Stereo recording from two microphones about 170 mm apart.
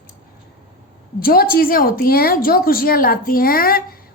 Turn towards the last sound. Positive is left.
turn(degrees=60)  # may be behind; listen again after turning